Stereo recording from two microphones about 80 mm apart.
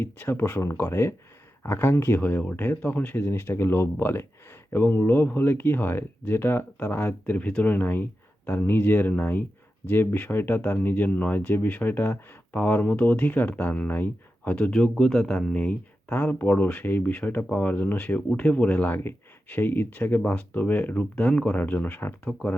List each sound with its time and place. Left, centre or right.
0.0 s speech: left